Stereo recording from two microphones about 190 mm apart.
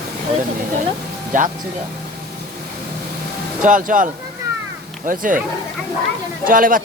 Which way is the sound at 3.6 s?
45° right (ahead or behind).